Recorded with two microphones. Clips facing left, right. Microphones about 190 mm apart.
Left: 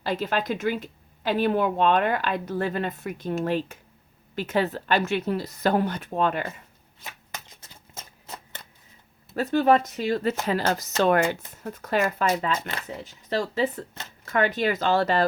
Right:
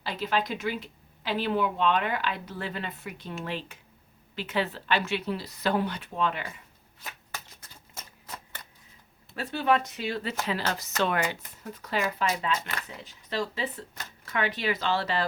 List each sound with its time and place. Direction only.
0.0 s a woman's voice: 50° left (ahead or behind)
7.0 s shuffling cards: 20° left (ahead or behind)
9.3 s a woman's voice: 45° left (ahead or behind)
12.9 s a woman's voice: 40° left (ahead or behind)